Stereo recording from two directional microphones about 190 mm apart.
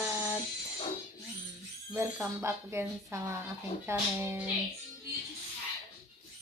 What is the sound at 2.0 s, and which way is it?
Speech, 15° right (ahead or behind).